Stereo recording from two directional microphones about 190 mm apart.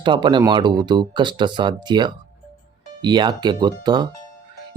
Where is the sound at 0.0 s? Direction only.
25° right (ahead or behind).